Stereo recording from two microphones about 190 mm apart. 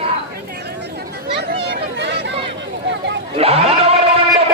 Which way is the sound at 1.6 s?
65° right (ahead or behind).